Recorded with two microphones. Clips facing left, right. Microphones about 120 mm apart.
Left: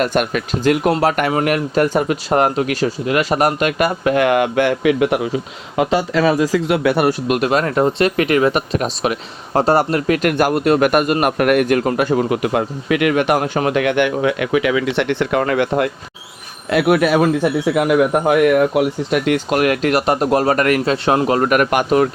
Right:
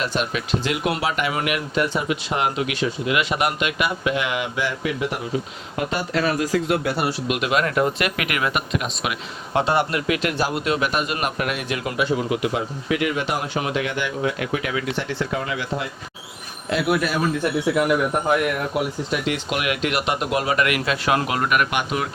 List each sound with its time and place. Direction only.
0.0 s speech: 50° left (ahead or behind)
1.3 s speech: 40° left (ahead or behind); by 5.2 s 70° left (ahead or behind)
5.8 s speech: 90° left
19.1 s speech: 55° left (ahead or behind)